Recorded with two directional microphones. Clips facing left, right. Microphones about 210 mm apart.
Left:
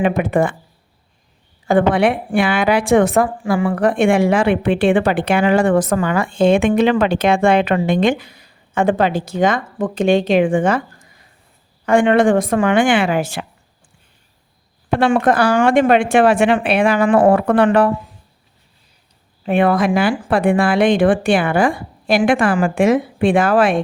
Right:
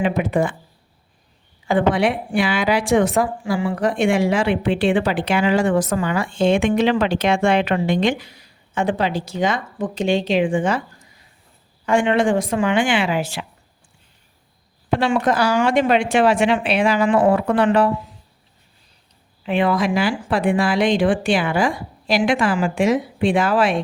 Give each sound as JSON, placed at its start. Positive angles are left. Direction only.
{"t": 0.0, "sound": "speech", "side_deg": 55}
{"t": 1.6, "sound": "a woman's voice", "side_deg": 55}
{"t": 14.9, "sound": "speech", "side_deg": 55}
{"t": 19.4, "sound": "speech", "side_deg": 50}